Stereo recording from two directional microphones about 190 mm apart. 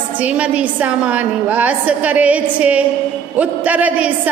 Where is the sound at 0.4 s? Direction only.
5° right (ahead or behind).